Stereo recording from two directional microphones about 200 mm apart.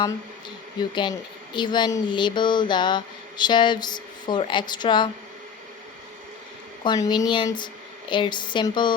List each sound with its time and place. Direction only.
0.8 s speech: 25° left (ahead or behind)
6.8 s speech: 20° left (ahead or behind)